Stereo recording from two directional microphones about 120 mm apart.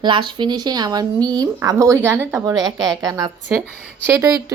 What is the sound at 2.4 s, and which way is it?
Speech, 30° right (ahead or behind).